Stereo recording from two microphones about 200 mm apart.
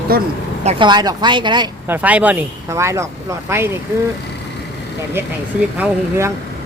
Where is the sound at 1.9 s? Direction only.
10° right (ahead or behind).